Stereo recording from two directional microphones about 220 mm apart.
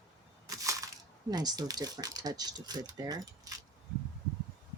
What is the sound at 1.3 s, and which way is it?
Speech, 20° right (ahead or behind).